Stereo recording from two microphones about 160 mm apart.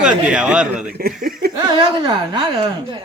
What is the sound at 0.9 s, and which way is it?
Speech, 65° right (ahead or behind).